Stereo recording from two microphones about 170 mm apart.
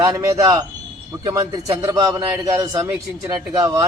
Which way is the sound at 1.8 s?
25° right (ahead or behind).